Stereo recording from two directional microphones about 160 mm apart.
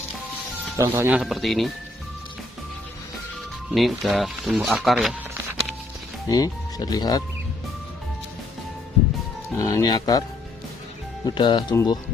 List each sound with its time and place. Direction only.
0.7 s speech: 15° right (ahead or behind)
1.2 s speech: centre (ahead or behind)
3.7 s speech: centre (ahead or behind)
6.2 s speech: 20° left (ahead or behind)
9.6 s speech: 25° left (ahead or behind)
11.2 s speech: 30° left (ahead or behind)